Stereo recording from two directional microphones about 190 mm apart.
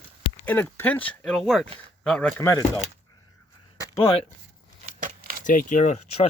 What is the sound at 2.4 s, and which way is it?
Speech, 20° left (ahead or behind).